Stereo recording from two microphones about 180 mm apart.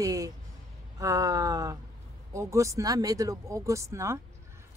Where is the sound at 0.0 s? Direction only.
20° right (ahead or behind).